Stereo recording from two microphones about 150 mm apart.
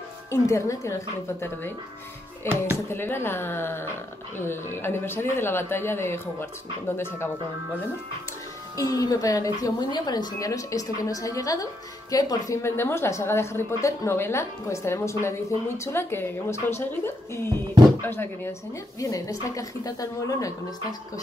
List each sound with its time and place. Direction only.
0.3 s a woman's voice: 20° left (ahead or behind)
2.9 s speech: 15° left (ahead or behind)
8.7 s a woman's voice: 25° left (ahead or behind)